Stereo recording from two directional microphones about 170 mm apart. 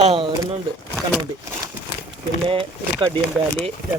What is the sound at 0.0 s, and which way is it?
Speech, 35° right (ahead or behind).